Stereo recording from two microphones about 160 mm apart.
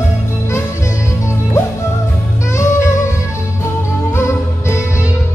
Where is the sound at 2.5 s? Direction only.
15° left (ahead or behind).